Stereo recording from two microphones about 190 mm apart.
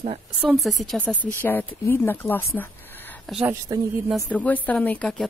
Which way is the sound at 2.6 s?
10° left (ahead or behind).